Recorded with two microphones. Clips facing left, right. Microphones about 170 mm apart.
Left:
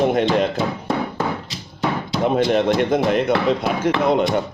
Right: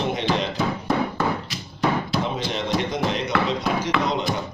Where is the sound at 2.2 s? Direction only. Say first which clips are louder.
Left 9 dB; 55° left (ahead or behind).